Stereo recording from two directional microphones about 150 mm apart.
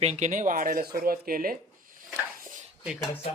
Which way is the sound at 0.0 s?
50° right (ahead or behind).